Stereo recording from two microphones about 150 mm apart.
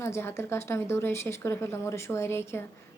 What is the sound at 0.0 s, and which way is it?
Speech, 15° left (ahead or behind).